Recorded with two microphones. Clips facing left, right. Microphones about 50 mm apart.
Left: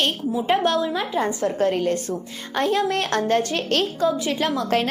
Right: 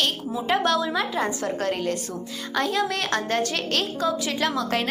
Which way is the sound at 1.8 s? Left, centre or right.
Left.